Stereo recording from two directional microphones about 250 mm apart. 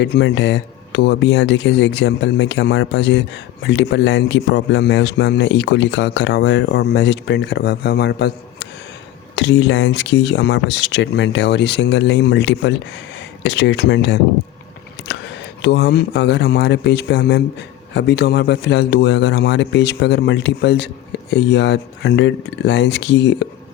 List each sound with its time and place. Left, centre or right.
0.0 s speech: left
15.6 s speech: left